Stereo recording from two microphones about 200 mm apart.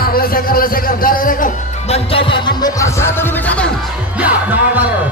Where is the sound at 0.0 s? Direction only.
50° left (ahead or behind).